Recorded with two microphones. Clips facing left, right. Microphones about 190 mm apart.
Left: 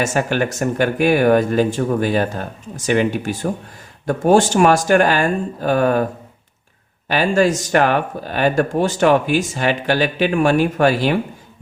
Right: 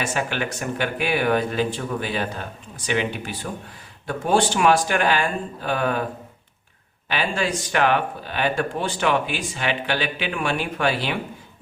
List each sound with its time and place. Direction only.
0.0 s speech: 45° left (ahead or behind)
7.1 s speech: 45° left (ahead or behind)